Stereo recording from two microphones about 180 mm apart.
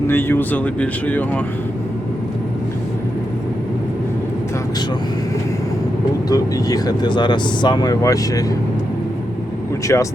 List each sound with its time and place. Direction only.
0.1 s speech: 10° left (ahead or behind)
6.2 s speech: 20° left (ahead or behind)
9.8 s speech: 15° left (ahead or behind)